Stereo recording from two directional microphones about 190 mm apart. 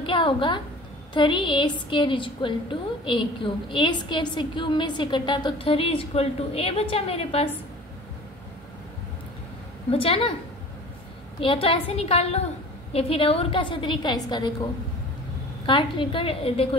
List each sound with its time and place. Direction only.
0.0 s a sound: 25° left (ahead or behind)
1.1 s a woman's voice: 25° left (ahead or behind)
9.8 s a woman's voice: 30° left (ahead or behind)
11.3 s a woman's voice: 30° left (ahead or behind)
15.6 s a woman's voice: 25° left (ahead or behind)